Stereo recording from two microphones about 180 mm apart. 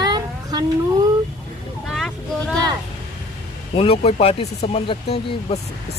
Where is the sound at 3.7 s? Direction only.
35° left (ahead or behind).